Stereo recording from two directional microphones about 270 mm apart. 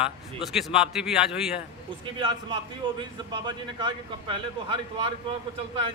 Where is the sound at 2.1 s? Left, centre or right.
Centre.